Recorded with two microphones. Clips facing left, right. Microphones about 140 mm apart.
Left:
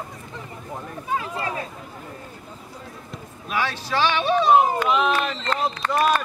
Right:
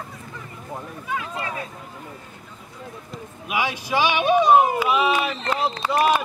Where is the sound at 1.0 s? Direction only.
35° left (ahead or behind).